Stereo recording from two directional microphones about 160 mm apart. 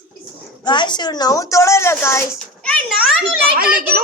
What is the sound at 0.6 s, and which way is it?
A woman's voice, 30° left (ahead or behind).